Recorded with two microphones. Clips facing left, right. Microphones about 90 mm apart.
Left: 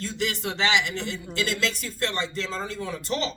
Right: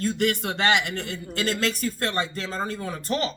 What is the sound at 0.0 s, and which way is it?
A man's voice, 50° right (ahead or behind).